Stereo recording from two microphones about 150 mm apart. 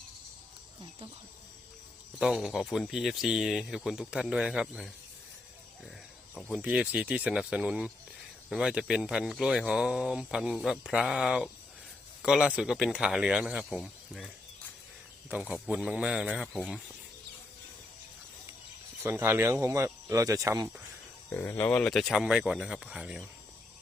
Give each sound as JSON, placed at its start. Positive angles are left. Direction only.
{"t": 2.1, "sound": "speech", "side_deg": -5}
{"t": 6.3, "sound": "speech", "side_deg": -5}
{"t": 15.4, "sound": "speech", "side_deg": -5}
{"t": 19.0, "sound": "speech", "side_deg": -15}
{"t": 21.2, "sound": "speech", "side_deg": 15}